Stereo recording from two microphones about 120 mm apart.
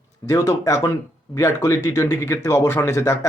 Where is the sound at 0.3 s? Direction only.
30° left (ahead or behind).